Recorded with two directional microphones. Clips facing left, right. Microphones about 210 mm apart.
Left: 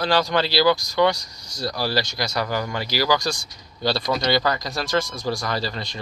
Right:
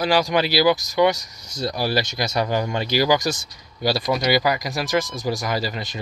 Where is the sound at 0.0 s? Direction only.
15° right (ahead or behind).